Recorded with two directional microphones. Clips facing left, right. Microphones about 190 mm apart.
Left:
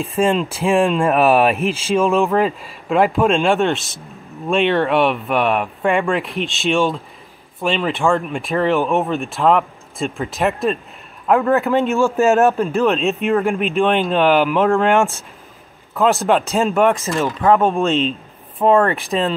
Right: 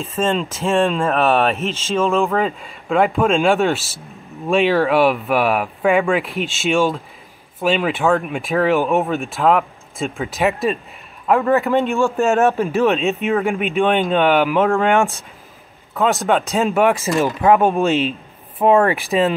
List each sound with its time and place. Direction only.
0.0 s speech: 10° left (ahead or behind)
17.0 s speech: 15° right (ahead or behind)
17.6 s speech: centre (ahead or behind)